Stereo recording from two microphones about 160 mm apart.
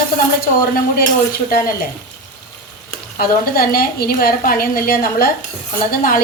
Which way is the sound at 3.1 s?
70° left (ahead or behind).